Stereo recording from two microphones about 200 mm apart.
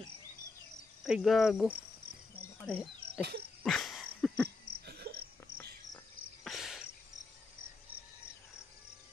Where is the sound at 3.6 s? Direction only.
Centre (ahead or behind).